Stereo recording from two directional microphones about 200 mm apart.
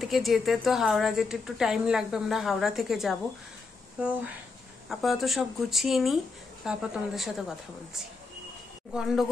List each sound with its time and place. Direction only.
0.0 s a woman's voice: centre (ahead or behind)
4.8 s a woman's voice: centre (ahead or behind)
8.9 s a woman's voice: centre (ahead or behind)